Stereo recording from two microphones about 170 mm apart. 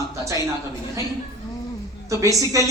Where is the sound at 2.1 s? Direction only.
20° right (ahead or behind).